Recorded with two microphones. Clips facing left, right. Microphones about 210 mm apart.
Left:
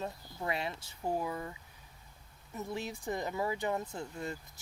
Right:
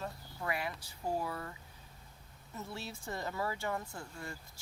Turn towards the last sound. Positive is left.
turn(degrees=20)  # may be behind; listen again after turning